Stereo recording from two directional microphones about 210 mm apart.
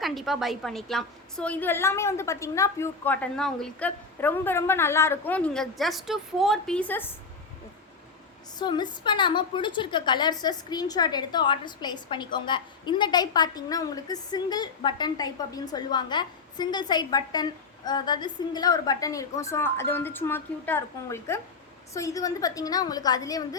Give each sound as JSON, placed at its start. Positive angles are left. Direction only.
{"t": 0.0, "sound": "a woman's voice", "side_deg": 0}
{"t": 8.5, "sound": "a woman's voice", "side_deg": 20}